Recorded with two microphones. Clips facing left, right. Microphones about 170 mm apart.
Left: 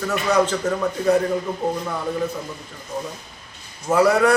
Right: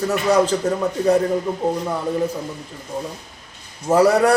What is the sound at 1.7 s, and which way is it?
Speech, 15° right (ahead or behind).